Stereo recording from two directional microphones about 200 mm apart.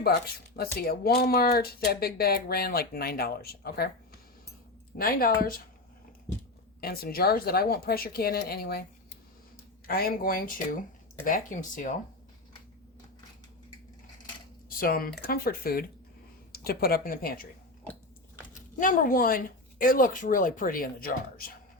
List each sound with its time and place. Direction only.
0.0 s speech: 50° left (ahead or behind)
6.8 s speech: 50° left (ahead or behind)
9.8 s speech: 45° left (ahead or behind)
14.8 s speech: 45° left (ahead or behind)
18.8 s speech: 40° left (ahead or behind)